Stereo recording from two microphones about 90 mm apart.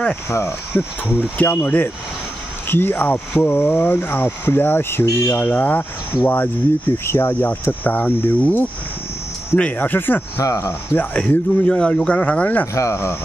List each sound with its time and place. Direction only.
0.3 s speech: 30° left (ahead or behind)
10.4 s speech: 35° left (ahead or behind)
11.0 s speech: 15° left (ahead or behind)
12.7 s speech: 35° left (ahead or behind)